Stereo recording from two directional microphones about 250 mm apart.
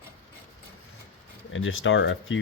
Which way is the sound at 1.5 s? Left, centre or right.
Left.